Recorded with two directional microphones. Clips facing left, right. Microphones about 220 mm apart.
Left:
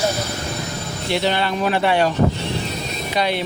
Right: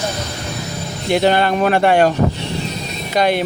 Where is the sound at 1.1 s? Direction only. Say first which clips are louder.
Right 6 dB; 50° right (ahead or behind).